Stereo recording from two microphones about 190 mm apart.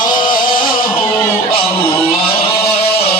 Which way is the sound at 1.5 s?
30° left (ahead or behind).